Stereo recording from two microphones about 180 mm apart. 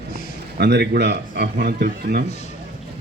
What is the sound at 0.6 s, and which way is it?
A man's voice, 70° right (ahead or behind).